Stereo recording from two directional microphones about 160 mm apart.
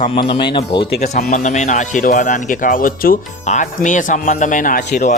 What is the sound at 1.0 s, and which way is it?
A man's voice, 45° left (ahead or behind).